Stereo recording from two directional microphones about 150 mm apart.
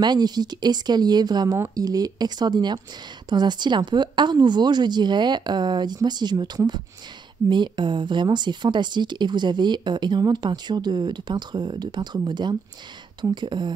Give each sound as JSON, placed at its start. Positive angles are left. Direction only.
{"t": 0.0, "sound": "a woman's voice", "side_deg": -30}